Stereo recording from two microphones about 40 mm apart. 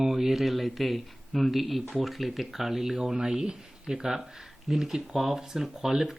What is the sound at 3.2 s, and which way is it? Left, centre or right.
Speech, centre.